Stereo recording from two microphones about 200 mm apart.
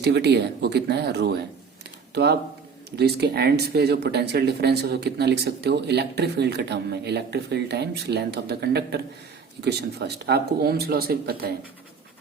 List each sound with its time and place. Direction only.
0.0 s speech: 55° right (ahead or behind)